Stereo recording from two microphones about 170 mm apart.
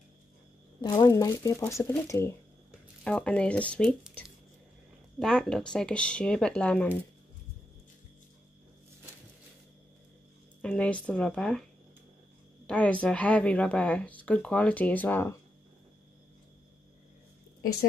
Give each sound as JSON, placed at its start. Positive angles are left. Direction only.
{"t": 0.7, "sound": "speech", "side_deg": 25}
{"t": 5.2, "sound": "speech", "side_deg": 5}
{"t": 10.6, "sound": "speech", "side_deg": 5}
{"t": 12.6, "sound": "speech", "side_deg": 10}